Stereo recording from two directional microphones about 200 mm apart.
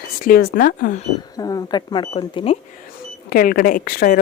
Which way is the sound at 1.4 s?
20° left (ahead or behind).